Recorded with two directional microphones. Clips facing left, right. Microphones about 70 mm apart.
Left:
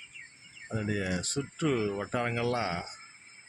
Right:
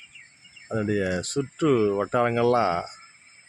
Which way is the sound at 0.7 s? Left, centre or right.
Right.